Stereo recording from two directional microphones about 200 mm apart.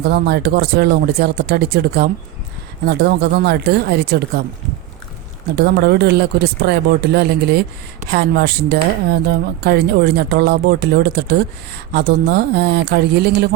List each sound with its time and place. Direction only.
0.0 s speech: 55° right (ahead or behind)
5.5 s speech: 55° right (ahead or behind)